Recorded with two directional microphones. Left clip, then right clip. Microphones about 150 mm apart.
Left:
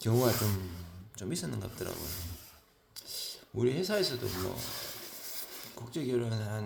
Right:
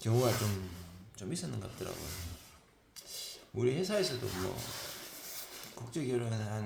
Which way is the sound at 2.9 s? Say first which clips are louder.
Left 4 dB; 30° left (ahead or behind).